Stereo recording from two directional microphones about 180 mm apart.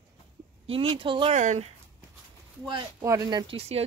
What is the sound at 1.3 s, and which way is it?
Speech, 40° right (ahead or behind).